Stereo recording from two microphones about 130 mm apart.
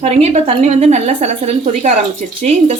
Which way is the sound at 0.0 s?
55° right (ahead or behind).